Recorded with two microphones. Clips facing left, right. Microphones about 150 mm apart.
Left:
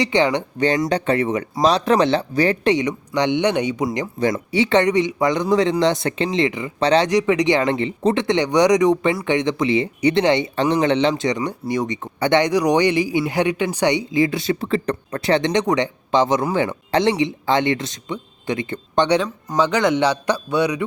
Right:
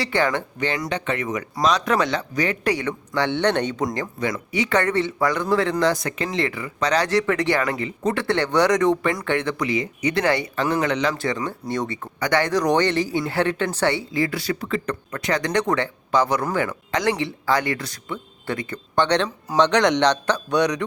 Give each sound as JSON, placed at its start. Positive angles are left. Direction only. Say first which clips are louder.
{"t": 0.0, "sound": "a man's voice", "louder": "left 4 dB", "side_deg": 20}
{"t": 0.6, "sound": "speech", "louder": "left 8 dB", "side_deg": 30}
{"t": 2.7, "sound": "speech", "louder": "left 4 dB", "side_deg": 15}
{"t": 4.2, "sound": "a man's voice", "louder": "left 7 dB", "side_deg": 30}
{"t": 7.1, "sound": "a man's voice", "louder": "left 4 dB", "side_deg": 15}
{"t": 11.9, "sound": "a man's voice", "louder": "left 5 dB", "side_deg": 25}
{"t": 19.0, "sound": "a man's voice", "louder": "left 3 dB", "side_deg": 10}